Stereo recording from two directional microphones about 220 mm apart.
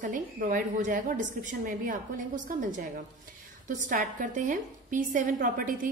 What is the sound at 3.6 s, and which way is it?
A woman's voice, 35° right (ahead or behind).